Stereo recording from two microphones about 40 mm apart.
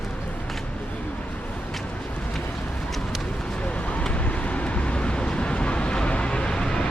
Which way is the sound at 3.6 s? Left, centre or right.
Left.